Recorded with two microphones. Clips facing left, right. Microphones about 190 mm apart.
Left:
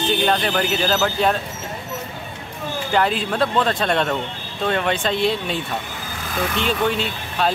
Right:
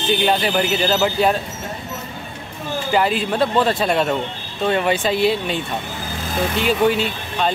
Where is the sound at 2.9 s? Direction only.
5° right (ahead or behind).